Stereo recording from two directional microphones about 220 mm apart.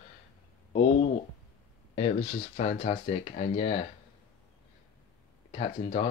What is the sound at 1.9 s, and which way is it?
Speech, 30° left (ahead or behind).